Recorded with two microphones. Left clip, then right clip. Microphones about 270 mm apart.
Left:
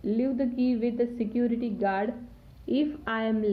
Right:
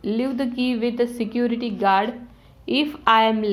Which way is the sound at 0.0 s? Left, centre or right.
Centre.